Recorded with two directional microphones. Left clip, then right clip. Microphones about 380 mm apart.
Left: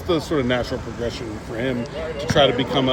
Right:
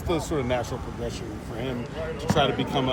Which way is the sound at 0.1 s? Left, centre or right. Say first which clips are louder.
Left 5 dB; left.